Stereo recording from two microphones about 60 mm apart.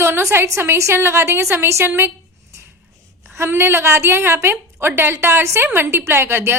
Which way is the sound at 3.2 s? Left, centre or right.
Right.